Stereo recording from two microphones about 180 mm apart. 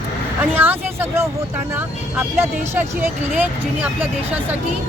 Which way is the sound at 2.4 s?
10° right (ahead or behind).